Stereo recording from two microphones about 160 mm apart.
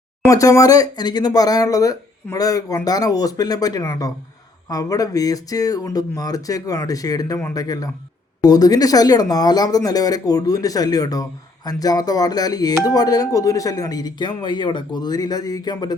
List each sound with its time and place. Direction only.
0.3 s speech: 20° left (ahead or behind)